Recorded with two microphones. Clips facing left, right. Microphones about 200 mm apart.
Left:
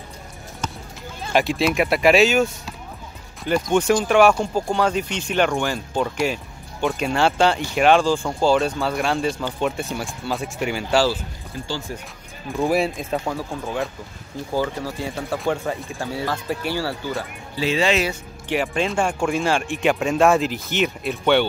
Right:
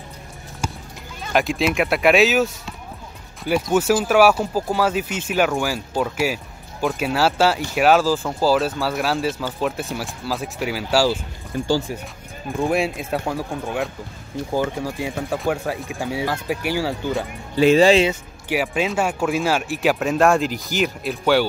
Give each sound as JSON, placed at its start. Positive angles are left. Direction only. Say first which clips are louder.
{"t": 0.6, "sound": "clip-clop", "louder": "right 2 dB", "side_deg": -10}
{"t": 1.3, "sound": "speech", "louder": "even", "side_deg": 0}
{"t": 12.6, "sound": "speech", "louder": "left 1 dB", "side_deg": 0}
{"t": 15.3, "sound": "speech", "louder": "even", "side_deg": 0}
{"t": 16.0, "sound": "speech", "louder": "right 2 dB", "side_deg": -15}
{"t": 17.7, "sound": "speech", "louder": "right 5 dB", "side_deg": -35}
{"t": 18.5, "sound": "speech", "louder": "right 1 dB", "side_deg": -5}